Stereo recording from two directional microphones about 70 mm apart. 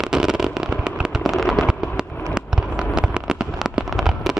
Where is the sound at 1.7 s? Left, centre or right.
Centre.